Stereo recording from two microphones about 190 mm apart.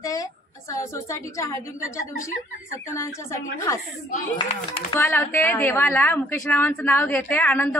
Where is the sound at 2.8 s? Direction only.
15° left (ahead or behind).